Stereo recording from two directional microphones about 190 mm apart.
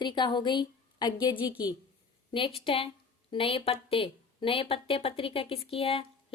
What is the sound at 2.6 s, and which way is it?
A woman's voice, 30° left (ahead or behind).